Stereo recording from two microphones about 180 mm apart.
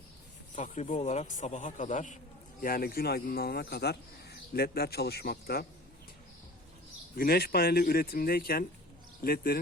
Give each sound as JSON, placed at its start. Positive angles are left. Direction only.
{"t": 0.5, "sound": "a man's voice", "side_deg": 45}
{"t": 7.2, "sound": "speech", "side_deg": 55}